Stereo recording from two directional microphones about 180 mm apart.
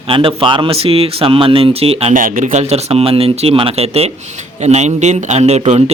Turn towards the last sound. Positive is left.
turn(degrees=-35)  # may be behind; listen again after turning